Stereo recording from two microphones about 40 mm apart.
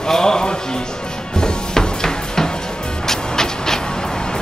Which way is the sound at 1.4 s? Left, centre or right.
Centre.